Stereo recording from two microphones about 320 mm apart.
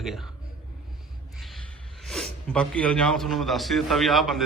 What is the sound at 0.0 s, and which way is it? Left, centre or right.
Speech, centre.